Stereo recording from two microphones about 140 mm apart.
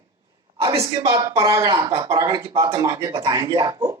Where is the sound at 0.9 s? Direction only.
35° right (ahead or behind).